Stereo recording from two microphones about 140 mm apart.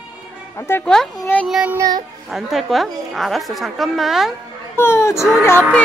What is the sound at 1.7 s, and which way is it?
Speech, 25° right (ahead or behind).